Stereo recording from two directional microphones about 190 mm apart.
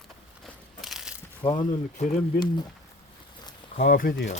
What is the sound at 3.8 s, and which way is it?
Speech, 50° left (ahead or behind).